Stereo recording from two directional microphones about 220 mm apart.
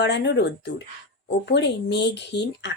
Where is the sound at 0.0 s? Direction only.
50° left (ahead or behind).